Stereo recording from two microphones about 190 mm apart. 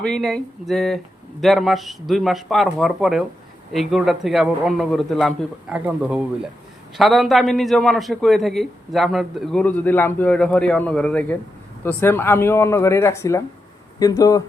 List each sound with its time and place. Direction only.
0.0 s a man's voice: 5° left (ahead or behind)